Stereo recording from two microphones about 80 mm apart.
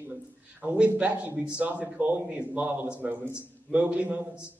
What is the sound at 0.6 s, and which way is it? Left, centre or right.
A man's voice, centre.